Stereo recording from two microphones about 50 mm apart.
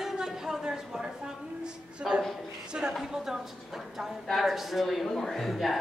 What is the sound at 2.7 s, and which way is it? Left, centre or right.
A woman's voice, centre.